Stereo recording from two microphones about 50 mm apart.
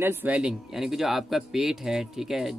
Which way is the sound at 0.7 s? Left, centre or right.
Centre.